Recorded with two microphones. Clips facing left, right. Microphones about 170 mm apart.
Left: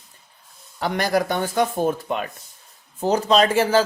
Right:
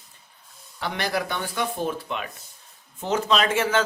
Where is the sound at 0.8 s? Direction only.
45° left (ahead or behind).